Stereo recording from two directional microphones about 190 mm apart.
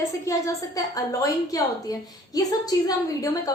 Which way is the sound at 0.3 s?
15° left (ahead or behind).